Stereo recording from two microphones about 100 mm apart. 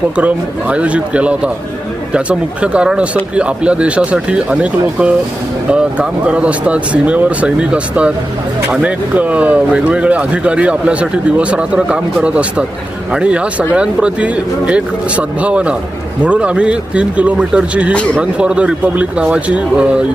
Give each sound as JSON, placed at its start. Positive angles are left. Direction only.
{"t": 0.2, "sound": "speech", "side_deg": -10}